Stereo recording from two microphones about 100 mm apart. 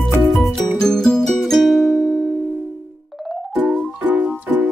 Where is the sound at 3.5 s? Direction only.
15° right (ahead or behind).